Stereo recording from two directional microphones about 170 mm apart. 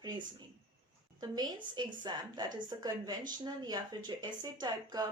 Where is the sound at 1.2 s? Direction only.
25° right (ahead or behind).